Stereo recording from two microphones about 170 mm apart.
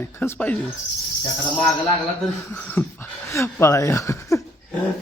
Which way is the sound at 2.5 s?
15° left (ahead or behind).